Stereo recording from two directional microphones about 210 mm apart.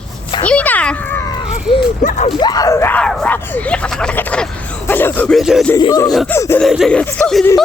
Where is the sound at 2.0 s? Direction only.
35° left (ahead or behind).